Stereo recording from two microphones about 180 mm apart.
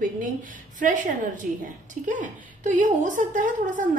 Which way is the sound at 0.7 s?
45° right (ahead or behind).